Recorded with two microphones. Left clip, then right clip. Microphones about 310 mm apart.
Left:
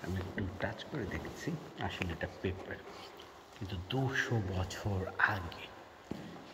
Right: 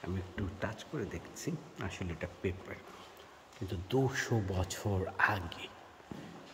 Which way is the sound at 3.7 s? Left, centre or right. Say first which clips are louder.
Right 4 dB; centre.